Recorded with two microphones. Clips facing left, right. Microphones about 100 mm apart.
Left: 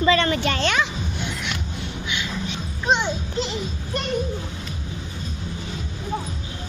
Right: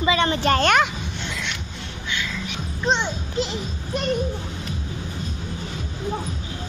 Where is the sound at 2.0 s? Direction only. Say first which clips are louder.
Right 2 dB; 20° left (ahead or behind).